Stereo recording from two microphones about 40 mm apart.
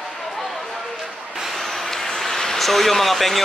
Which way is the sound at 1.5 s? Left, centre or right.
Centre.